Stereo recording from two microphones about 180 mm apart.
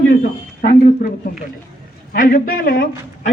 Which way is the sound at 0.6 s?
50° left (ahead or behind).